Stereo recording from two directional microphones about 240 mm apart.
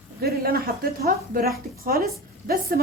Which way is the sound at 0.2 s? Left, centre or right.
Right.